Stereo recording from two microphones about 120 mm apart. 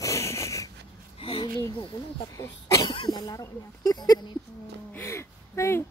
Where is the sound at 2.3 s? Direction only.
25° left (ahead or behind).